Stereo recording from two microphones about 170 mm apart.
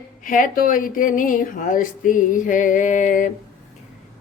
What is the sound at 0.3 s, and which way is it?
Speech, 55° left (ahead or behind).